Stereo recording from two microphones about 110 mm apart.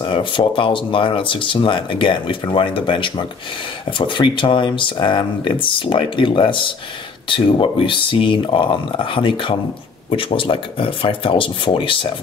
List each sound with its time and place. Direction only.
0.0 s speech: 50° left (ahead or behind)